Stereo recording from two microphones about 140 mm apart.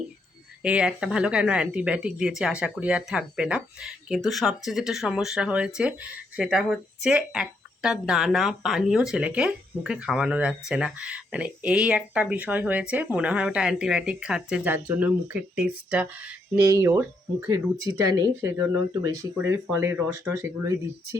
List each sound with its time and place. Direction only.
0.6 s speech: 5° right (ahead or behind)
16.6 s speech: 20° right (ahead or behind)